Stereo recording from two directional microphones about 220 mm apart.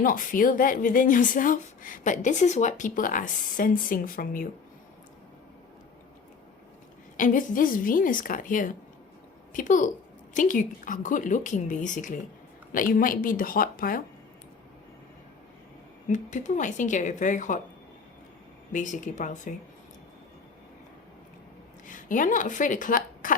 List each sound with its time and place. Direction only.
0.0 s a woman's voice: 40° left (ahead or behind)
7.2 s a woman's voice: 35° left (ahead or behind)
16.0 s a woman's voice: 35° left (ahead or behind)
18.7 s a woman's voice: 35° left (ahead or behind)
21.8 s speech: 35° left (ahead or behind)